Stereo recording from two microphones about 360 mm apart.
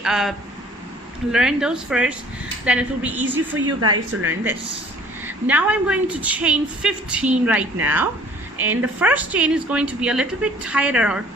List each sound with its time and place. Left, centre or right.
0.0 s a woman's voice: centre
3.8 s speech: right
5.2 s a woman's voice: centre